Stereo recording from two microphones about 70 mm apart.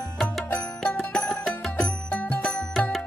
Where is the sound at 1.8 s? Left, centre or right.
Left.